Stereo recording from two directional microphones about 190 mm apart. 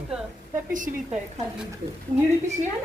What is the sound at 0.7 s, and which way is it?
Speech, 45° right (ahead or behind).